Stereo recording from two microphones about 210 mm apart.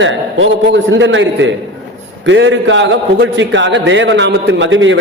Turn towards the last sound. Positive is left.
turn(degrees=-65)  # may be behind; listen again after turning